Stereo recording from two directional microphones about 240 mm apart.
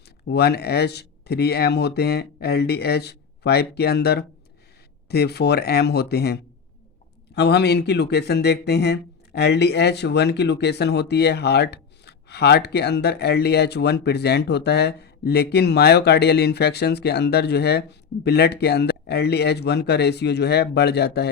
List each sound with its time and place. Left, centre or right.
0.3 s speech: left